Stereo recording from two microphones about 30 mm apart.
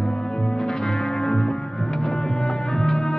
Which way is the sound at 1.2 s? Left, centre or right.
Left.